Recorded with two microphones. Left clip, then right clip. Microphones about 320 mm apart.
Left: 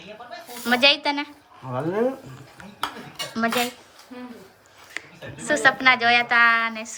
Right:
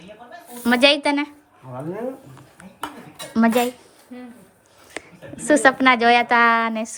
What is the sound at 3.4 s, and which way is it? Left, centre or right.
Speech, centre.